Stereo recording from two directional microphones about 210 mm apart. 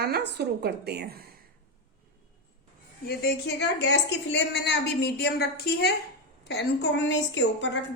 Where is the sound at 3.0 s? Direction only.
50° left (ahead or behind).